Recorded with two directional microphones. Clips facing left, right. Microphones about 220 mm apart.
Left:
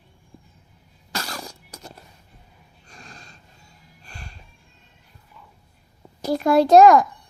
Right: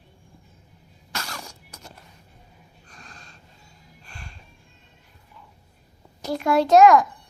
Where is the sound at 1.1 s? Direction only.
35° left (ahead or behind).